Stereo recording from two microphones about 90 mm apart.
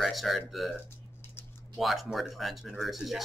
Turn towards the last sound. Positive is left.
turn(degrees=0)  # may be behind; listen again after turning